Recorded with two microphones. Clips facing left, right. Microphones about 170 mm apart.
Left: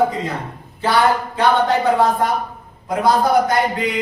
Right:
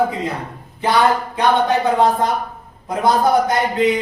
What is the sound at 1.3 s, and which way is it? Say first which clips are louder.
Speech: left 1 dB; 20° right (ahead or behind).